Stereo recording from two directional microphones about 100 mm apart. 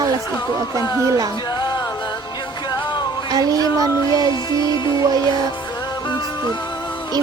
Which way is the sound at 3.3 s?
40° right (ahead or behind).